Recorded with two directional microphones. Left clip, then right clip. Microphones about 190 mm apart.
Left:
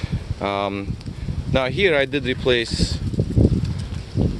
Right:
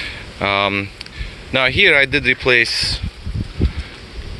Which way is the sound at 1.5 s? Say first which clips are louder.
Right 6 dB; 10° left (ahead or behind).